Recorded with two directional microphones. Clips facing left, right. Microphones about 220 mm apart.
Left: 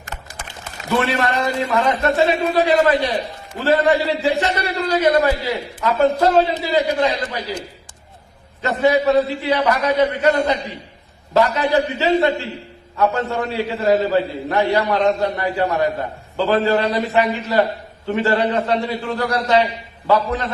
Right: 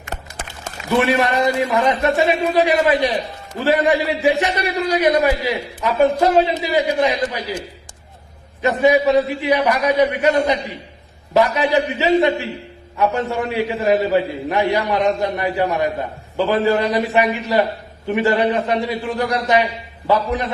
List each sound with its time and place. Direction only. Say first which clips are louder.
0.9 s a man's voice: right 3 dB; 15° right (ahead or behind)
8.6 s a man's voice: right 1 dB; 15° right (ahead or behind)